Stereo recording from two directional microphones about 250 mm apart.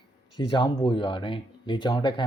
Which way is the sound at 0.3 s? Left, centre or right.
Centre.